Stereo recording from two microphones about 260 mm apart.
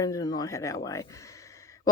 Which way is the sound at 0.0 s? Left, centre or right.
Centre.